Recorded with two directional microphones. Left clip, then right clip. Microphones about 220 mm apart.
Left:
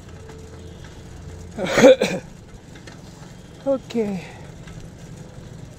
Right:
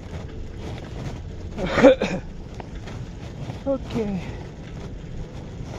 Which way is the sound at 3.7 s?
60° left (ahead or behind).